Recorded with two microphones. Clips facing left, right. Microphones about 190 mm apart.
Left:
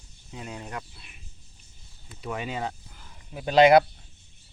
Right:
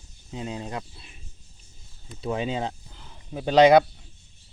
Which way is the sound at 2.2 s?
25° right (ahead or behind).